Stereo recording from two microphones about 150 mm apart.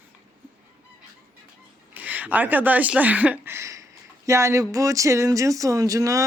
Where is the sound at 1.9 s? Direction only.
10° right (ahead or behind).